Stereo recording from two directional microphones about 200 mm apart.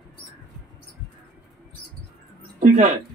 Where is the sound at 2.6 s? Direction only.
35° right (ahead or behind).